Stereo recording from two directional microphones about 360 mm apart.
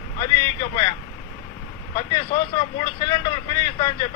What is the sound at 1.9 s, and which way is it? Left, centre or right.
Speech, centre.